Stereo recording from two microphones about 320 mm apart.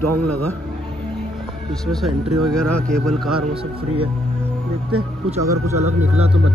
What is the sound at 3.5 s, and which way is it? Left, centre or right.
Speech, centre.